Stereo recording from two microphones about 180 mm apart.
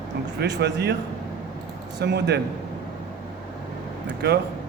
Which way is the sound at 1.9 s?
70° right (ahead or behind).